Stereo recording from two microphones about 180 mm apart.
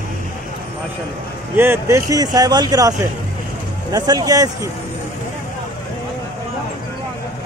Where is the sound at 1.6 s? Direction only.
15° right (ahead or behind).